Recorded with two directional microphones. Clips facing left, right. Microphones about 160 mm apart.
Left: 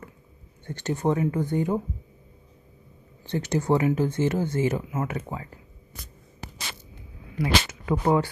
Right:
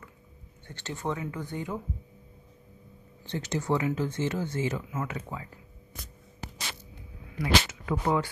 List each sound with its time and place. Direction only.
0.7 s speech: 15° left (ahead or behind)
1.0 s speech: 35° left (ahead or behind)
3.3 s speech: 45° left (ahead or behind)
4.7 s speech: 35° left (ahead or behind)
7.3 s a sound: 25° left (ahead or behind)
8.0 s speech: 35° left (ahead or behind)